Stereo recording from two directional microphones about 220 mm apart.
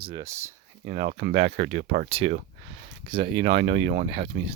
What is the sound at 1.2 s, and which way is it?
Speech, 40° right (ahead or behind).